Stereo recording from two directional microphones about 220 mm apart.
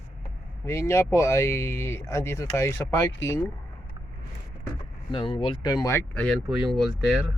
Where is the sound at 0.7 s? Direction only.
10° left (ahead or behind).